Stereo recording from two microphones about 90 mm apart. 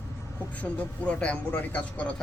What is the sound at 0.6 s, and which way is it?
Speech, 15° left (ahead or behind).